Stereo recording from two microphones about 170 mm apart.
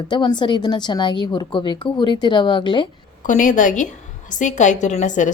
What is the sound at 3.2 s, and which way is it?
A woman's voice, 50° left (ahead or behind).